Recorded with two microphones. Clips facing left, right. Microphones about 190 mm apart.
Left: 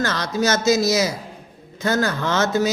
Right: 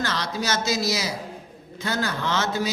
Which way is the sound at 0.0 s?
45° left (ahead or behind).